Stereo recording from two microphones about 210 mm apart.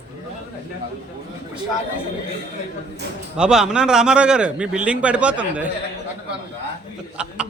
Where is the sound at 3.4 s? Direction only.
5° right (ahead or behind).